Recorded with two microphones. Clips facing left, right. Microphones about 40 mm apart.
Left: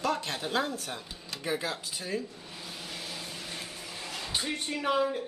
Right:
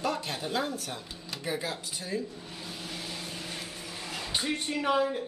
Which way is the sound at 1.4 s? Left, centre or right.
Left.